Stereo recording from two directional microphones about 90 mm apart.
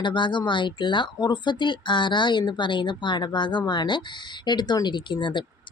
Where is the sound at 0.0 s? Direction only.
60° left (ahead or behind).